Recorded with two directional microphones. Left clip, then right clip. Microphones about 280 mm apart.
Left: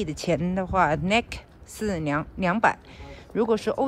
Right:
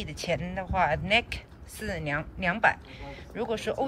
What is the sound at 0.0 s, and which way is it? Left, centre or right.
Speech, left.